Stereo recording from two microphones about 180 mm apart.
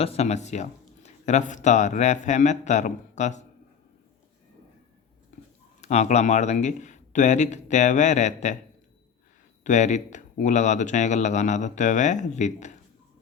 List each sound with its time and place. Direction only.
0.0 s speech: 35° left (ahead or behind)
5.8 s speech: 40° left (ahead or behind)
9.6 s speech: 40° left (ahead or behind)